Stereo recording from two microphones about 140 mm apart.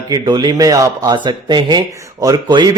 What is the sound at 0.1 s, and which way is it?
Speech, 30° right (ahead or behind).